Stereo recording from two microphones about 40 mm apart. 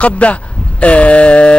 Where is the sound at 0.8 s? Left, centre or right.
Left.